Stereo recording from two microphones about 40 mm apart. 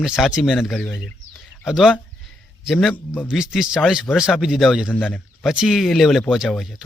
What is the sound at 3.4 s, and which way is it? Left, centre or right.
Speech, centre.